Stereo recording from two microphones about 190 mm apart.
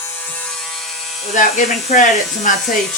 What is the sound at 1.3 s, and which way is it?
Speech, 40° left (ahead or behind).